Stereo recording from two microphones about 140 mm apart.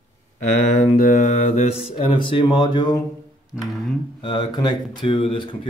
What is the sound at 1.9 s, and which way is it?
Speech, 40° left (ahead or behind).